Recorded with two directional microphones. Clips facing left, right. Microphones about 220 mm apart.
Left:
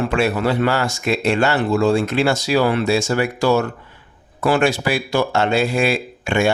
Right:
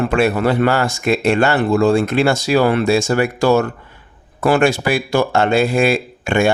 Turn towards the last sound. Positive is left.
turn(degrees=-50)  # may be behind; listen again after turning